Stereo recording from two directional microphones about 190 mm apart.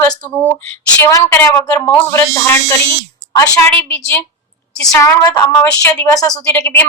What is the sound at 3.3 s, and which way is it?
Speech, 20° left (ahead or behind).